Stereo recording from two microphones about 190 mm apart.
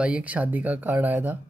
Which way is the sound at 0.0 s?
5° right (ahead or behind).